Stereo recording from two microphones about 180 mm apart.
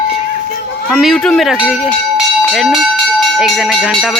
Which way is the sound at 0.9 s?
Centre (ahead or behind).